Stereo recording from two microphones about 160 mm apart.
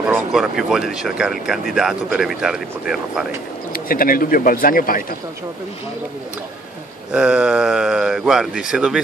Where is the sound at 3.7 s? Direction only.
65° left (ahead or behind).